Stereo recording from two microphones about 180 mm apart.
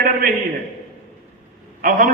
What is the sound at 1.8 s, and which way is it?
Speech, 50° right (ahead or behind).